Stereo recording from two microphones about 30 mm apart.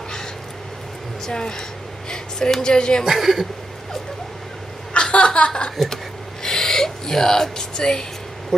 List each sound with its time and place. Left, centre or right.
1.2 s music: left
2.0 s a sound: left
2.6 s music: left
3.1 s a woman's voice: centre
4.9 s chuckle: left
6.4 s a sound: centre